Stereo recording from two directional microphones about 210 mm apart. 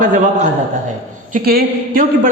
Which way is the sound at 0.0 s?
40° right (ahead or behind).